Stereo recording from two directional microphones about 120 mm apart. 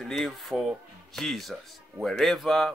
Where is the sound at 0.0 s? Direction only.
Centre (ahead or behind).